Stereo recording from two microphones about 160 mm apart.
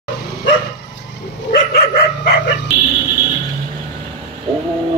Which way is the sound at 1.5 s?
90° left.